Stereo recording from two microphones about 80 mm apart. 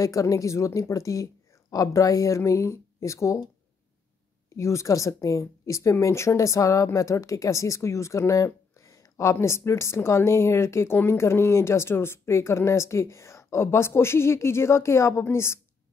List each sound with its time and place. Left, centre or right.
0.0 s a woman's voice: left
4.6 s a woman's voice: left